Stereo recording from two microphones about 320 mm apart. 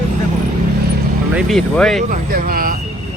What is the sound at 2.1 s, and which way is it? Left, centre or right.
Speech, right.